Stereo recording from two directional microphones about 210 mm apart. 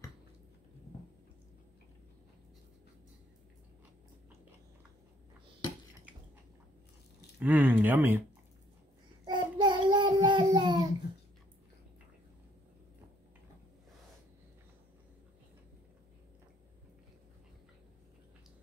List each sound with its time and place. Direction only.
7.3 s speech: 10° right (ahead or behind)
9.2 s child singing: 20° right (ahead or behind)